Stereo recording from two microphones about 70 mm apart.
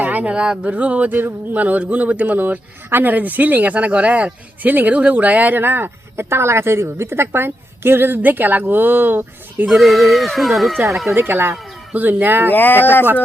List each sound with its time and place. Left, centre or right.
0.0 s speech: right
9.6 s speech: centre
11.1 s speech: right
12.5 s speech: left